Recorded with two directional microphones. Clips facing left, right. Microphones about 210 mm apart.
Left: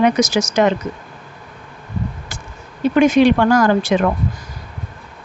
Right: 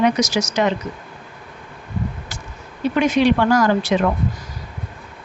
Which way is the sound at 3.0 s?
50° left (ahead or behind).